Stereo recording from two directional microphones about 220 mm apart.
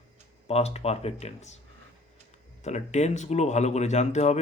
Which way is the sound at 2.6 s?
30° left (ahead or behind).